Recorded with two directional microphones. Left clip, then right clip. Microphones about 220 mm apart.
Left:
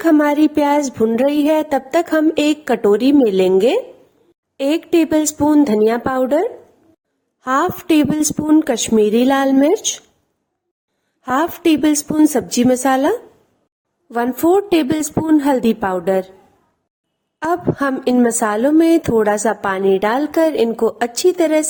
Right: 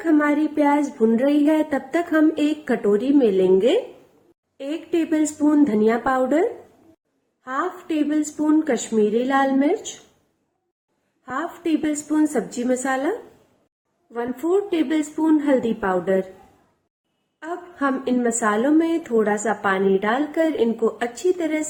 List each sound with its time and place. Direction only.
0.0 s a woman's voice: 45° left (ahead or behind)
11.2 s a woman's voice: 45° left (ahead or behind)
14.1 s a woman's voice: 50° left (ahead or behind)
17.4 s a woman's voice: 45° left (ahead or behind)